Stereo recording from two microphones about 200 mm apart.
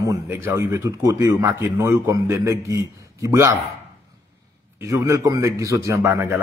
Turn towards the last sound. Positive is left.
turn(degrees=-15)  # may be behind; listen again after turning